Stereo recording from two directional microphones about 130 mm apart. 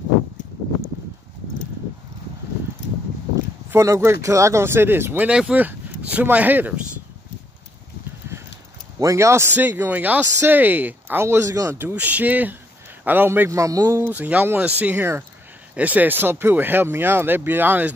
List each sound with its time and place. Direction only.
3.7 s speech: 20° right (ahead or behind)
9.0 s speech: 20° right (ahead or behind)
11.9 s speech: 10° right (ahead or behind)